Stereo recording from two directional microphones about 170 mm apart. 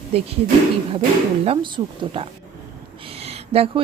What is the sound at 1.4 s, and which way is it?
Speech, 35° right (ahead or behind).